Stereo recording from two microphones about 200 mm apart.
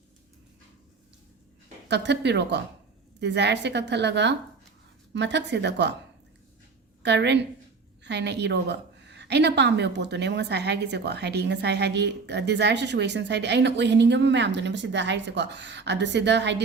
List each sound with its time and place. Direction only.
1.9 s a woman's voice: 60° right (ahead or behind)
7.0 s a woman's voice: 60° right (ahead or behind)